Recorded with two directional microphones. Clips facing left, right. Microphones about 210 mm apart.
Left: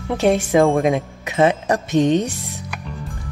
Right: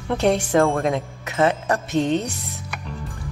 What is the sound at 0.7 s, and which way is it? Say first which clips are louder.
Speech: left 4 dB; 15° left (ahead or behind).